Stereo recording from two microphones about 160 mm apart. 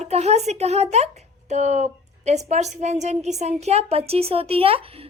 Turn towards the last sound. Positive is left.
turn(degrees=-35)  # may be behind; listen again after turning